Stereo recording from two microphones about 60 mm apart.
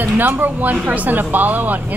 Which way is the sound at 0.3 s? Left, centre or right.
Right.